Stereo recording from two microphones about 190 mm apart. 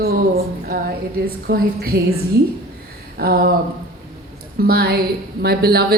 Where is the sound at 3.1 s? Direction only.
55° right (ahead or behind).